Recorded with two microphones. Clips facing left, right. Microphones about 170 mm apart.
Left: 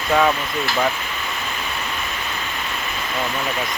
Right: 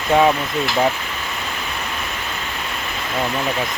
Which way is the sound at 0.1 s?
20° right (ahead or behind).